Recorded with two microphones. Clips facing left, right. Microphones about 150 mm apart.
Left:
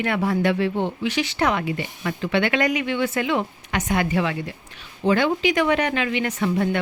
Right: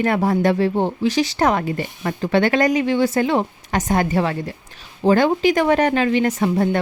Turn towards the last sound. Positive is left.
turn(degrees=-40)  # may be behind; listen again after turning